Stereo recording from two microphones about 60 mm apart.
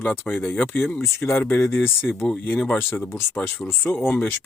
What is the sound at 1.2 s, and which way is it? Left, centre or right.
Speech, left.